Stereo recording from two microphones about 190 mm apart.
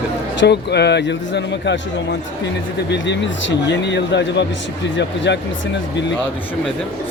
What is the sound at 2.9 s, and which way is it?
Speech, 70° left (ahead or behind).